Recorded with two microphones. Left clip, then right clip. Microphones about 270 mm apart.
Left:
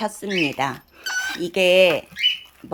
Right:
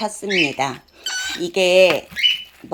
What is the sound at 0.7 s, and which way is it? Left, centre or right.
Speech, centre.